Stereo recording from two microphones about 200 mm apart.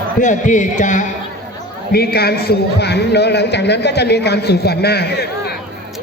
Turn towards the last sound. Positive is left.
turn(degrees=55)  # may be behind; listen again after turning